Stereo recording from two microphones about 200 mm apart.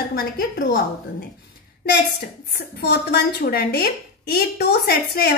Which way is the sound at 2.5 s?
55° left (ahead or behind).